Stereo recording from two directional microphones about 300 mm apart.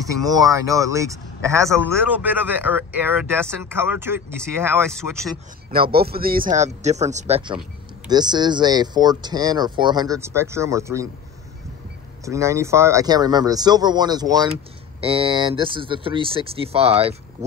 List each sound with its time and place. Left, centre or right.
0.2 s speech: centre
5.7 s speech: right; by 11.1 s centre
12.3 s speech: centre